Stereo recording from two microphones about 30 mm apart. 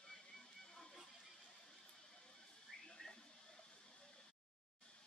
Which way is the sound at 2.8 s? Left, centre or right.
Left.